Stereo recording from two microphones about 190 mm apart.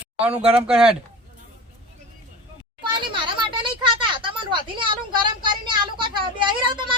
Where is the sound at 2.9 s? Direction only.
25° right (ahead or behind).